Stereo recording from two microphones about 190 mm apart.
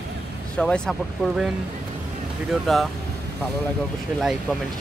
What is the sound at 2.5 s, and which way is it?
Speech, centre (ahead or behind).